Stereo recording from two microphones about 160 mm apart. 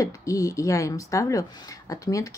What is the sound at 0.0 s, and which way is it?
Speech, 20° left (ahead or behind).